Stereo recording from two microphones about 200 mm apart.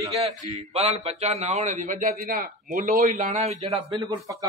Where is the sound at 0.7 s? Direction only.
30° right (ahead or behind).